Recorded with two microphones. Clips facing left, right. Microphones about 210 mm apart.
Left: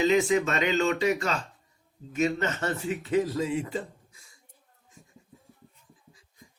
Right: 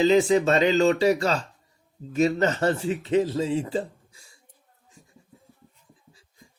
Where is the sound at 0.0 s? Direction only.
30° right (ahead or behind).